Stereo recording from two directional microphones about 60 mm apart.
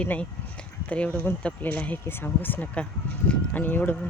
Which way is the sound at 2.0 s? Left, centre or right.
Left.